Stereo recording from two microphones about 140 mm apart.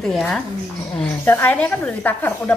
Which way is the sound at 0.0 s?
5° left (ahead or behind).